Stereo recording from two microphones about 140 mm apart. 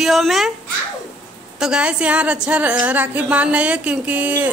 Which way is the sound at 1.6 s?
5° right (ahead or behind).